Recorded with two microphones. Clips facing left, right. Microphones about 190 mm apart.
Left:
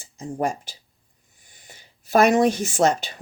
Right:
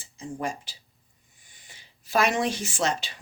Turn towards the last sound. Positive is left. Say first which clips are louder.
# left 8 dB
turn(degrees=45)  # may be behind; listen again after turning